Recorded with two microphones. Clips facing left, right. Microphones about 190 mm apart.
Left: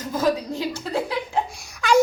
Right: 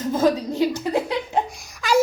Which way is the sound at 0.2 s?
15° right (ahead or behind).